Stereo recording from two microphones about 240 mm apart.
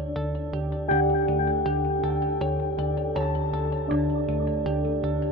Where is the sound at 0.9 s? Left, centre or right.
Centre.